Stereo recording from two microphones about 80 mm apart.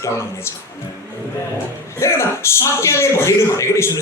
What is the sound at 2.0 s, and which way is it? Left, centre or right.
A man's voice, left.